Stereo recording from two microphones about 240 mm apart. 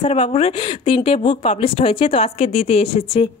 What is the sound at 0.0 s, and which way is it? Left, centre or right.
A woman's voice, left.